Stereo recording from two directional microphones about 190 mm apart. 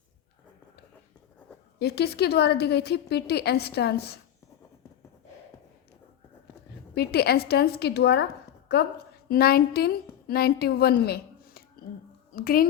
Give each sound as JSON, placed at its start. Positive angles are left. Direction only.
{"t": 1.8, "sound": "a woman's voice", "side_deg": 55}
{"t": 6.9, "sound": "a woman's voice", "side_deg": 55}
{"t": 9.3, "sound": "a woman's voice", "side_deg": 55}
{"t": 11.0, "sound": "a sound", "side_deg": 55}
{"t": 12.3, "sound": "a woman's voice", "side_deg": 50}